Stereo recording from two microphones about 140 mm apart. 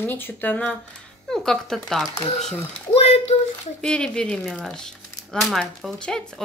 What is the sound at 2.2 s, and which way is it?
Speech, 55° left (ahead or behind).